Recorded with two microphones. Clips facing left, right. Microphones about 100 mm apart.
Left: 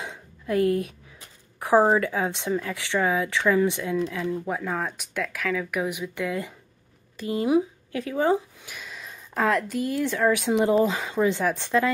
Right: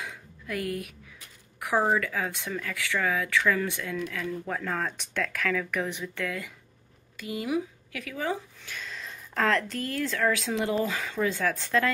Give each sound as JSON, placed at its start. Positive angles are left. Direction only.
{"t": 0.0, "sound": "a woman's voice", "side_deg": 25}
{"t": 8.6, "sound": "a woman's voice", "side_deg": 10}